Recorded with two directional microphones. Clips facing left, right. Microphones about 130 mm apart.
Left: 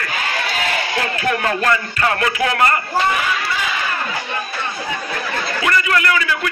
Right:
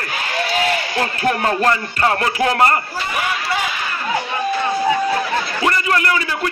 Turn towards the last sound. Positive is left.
turn(degrees=-30)  # may be behind; listen again after turning